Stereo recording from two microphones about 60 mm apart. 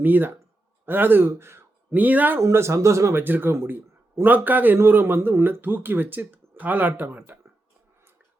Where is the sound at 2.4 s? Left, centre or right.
Right.